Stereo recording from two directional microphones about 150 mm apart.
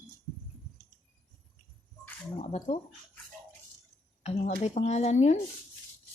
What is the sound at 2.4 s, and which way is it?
Speech, 45° left (ahead or behind).